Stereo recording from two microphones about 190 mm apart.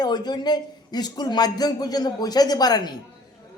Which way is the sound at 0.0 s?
20° left (ahead or behind).